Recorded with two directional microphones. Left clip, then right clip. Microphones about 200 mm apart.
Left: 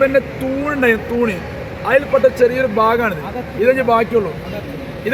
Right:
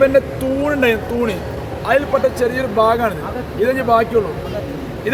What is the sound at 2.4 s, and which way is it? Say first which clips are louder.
Speech: left 2 dB; 30° left (ahead or behind).